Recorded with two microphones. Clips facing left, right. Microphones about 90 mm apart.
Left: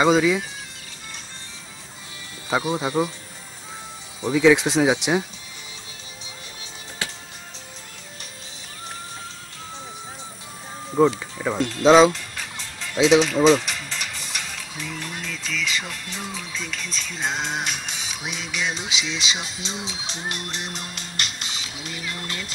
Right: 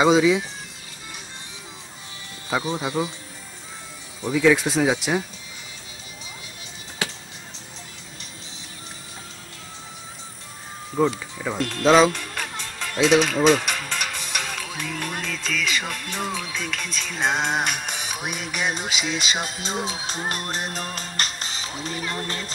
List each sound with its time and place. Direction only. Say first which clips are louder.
0.0 s speech: right 1 dB; centre (ahead or behind)
2.6 s speech: left 2 dB; 15° left (ahead or behind)
4.4 s speech: left 2 dB; centre (ahead or behind)
11.0 s speech: left 3 dB; 10° left (ahead or behind)
12.1 s music: right 2 dB; 60° right (ahead or behind)
13.0 s speech: left 2 dB; 55° right (ahead or behind); by 22.5 s 35° right (ahead or behind)